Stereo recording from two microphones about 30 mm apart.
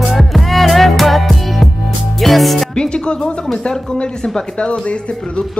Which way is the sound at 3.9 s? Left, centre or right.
Left.